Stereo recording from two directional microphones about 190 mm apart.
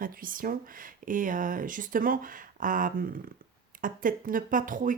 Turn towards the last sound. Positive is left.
turn(degrees=-45)  # may be behind; listen again after turning